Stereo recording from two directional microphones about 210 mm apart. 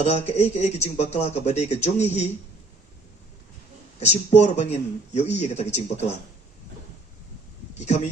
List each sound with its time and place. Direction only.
0.0 s a man's voice: 35° left (ahead or behind)
4.3 s a man's voice: 35° left (ahead or behind)
7.8 s a man's voice: 35° left (ahead or behind)